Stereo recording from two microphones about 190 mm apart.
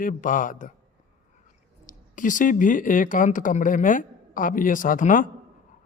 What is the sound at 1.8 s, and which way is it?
Speech, 45° left (ahead or behind).